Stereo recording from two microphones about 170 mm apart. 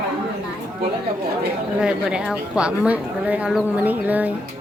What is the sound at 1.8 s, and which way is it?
Speech, 5° right (ahead or behind).